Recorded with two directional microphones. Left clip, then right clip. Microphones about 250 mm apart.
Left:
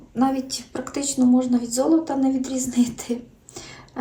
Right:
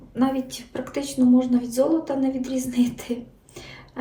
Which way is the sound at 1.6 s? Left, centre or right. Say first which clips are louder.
Left 1 dB; left.